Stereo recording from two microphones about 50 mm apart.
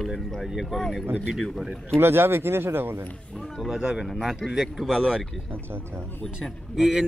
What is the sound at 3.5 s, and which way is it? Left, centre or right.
A man's voice, centre.